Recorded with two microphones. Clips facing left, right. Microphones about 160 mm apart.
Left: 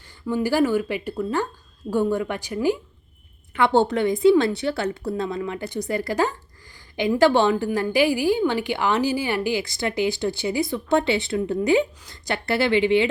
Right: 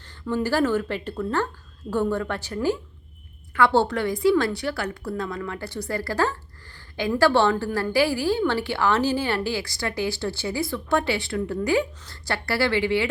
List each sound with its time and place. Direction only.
0.3 s a woman's voice: 10° left (ahead or behind)